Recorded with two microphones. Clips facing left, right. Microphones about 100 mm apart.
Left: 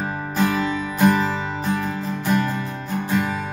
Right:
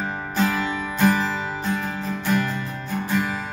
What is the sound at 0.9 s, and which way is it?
Music, 10° left (ahead or behind).